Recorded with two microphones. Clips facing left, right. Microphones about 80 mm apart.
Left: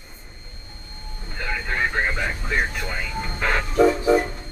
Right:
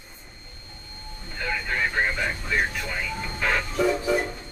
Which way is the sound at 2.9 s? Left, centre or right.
Left.